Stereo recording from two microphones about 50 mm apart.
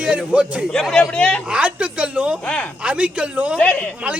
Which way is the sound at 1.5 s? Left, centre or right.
Right.